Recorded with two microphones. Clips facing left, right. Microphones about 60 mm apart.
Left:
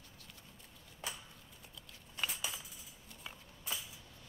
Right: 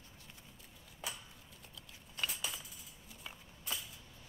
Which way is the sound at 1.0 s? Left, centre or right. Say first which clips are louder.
Even; centre.